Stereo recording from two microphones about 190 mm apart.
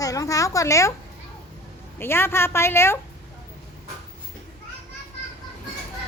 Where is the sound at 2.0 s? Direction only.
10° left (ahead or behind).